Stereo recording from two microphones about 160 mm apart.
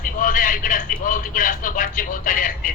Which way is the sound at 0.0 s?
60° left (ahead or behind).